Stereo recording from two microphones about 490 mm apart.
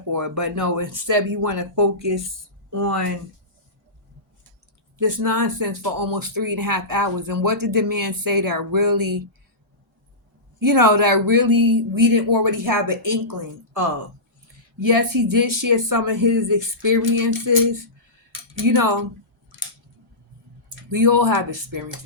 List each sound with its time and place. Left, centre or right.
0.1 s speech: right
4.9 s speech: right
10.6 s speech: right
14.8 s speech: right
20.7 s speech: right